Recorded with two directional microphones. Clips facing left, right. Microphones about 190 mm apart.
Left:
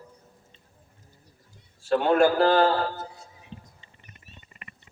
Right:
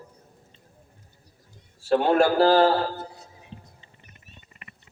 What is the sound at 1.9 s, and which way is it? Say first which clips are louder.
A man's voice: right 1 dB; 30° right (ahead or behind).